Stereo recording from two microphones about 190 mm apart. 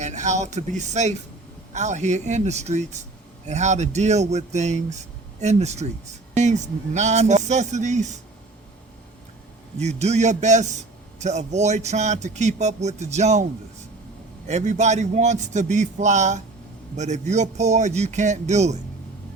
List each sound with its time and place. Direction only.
0.0 s a man's voice: 40° right (ahead or behind)
9.7 s a man's voice: 35° right (ahead or behind)
14.4 s a man's voice: 35° right (ahead or behind)